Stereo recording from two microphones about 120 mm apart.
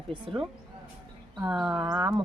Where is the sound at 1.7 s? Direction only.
35° right (ahead or behind).